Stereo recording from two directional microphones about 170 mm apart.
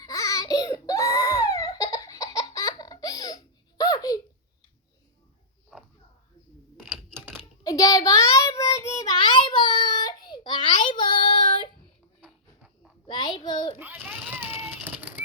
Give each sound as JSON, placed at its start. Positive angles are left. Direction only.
{"t": 0.0, "sound": "baby cry", "side_deg": 20}
{"t": 6.8, "sound": "typing", "side_deg": -10}
{"t": 7.6, "sound": "child singing", "side_deg": 20}
{"t": 12.2, "sound": "a sound", "side_deg": -5}
{"t": 13.1, "sound": "child singing", "side_deg": 25}
{"t": 13.7, "sound": "a sound", "side_deg": -10}
{"t": 14.3, "sound": "cat", "side_deg": -10}